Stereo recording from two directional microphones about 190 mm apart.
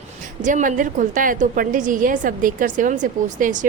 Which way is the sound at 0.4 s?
40° right (ahead or behind).